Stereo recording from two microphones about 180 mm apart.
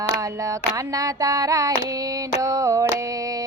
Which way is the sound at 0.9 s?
20° right (ahead or behind).